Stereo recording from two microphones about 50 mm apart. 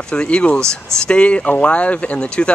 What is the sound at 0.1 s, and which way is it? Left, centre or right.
Speech, left.